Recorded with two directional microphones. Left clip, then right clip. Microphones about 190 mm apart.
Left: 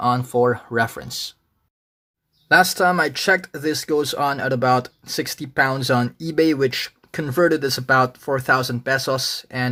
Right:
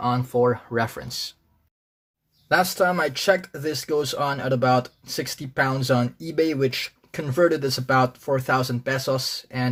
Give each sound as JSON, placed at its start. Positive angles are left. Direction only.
{"t": 0.0, "sound": "speech", "side_deg": 20}
{"t": 2.5, "sound": "speech", "side_deg": 20}